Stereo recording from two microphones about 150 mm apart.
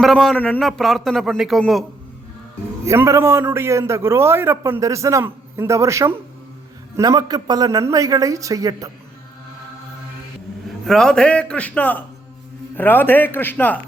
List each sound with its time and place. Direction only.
0.0 s speech: centre (ahead or behind)
2.8 s a man's voice: 20° right (ahead or behind)
10.8 s a man's voice: 5° left (ahead or behind)